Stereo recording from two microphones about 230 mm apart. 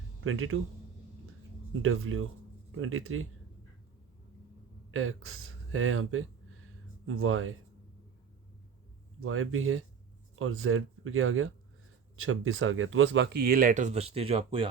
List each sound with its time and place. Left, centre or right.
0.3 s speech: right
1.8 s speech: right
4.9 s speech: right
9.2 s speech: right